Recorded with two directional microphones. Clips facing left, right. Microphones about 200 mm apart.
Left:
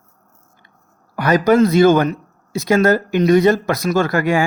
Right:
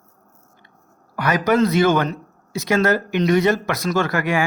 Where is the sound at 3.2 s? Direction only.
35° left (ahead or behind).